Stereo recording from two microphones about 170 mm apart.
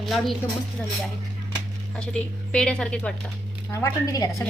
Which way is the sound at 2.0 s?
5° left (ahead or behind).